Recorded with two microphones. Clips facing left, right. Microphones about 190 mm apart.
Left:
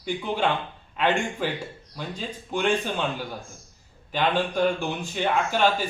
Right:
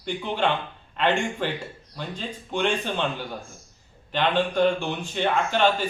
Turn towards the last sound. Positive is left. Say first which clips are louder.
# right 1 dB
turn(degrees=10)  # may be behind; listen again after turning